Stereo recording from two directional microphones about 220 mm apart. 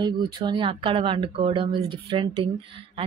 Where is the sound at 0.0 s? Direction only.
20° right (ahead or behind).